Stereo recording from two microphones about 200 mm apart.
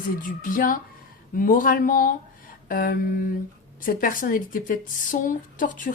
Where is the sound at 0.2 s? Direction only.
45° left (ahead or behind).